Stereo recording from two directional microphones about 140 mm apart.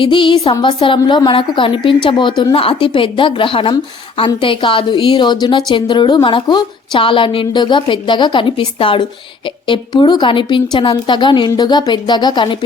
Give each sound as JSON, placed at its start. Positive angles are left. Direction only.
{"t": 0.0, "sound": "a woman's voice", "side_deg": 35}